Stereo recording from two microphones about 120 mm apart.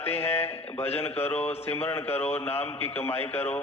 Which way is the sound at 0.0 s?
20° left (ahead or behind).